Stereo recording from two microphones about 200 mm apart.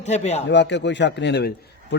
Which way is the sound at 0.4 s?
60° left (ahead or behind).